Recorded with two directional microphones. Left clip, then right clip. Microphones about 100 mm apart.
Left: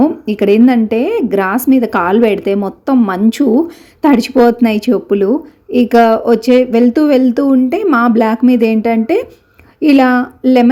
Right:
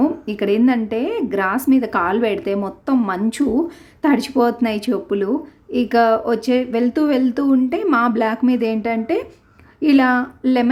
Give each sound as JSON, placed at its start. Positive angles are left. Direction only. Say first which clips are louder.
{"t": 0.0, "sound": "speech", "louder": "left 7 dB", "side_deg": 40}